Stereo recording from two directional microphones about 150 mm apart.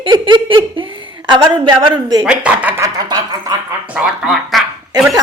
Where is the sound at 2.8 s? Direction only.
25° right (ahead or behind).